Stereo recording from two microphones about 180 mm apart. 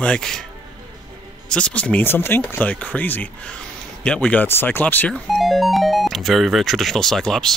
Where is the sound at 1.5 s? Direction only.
5° left (ahead or behind).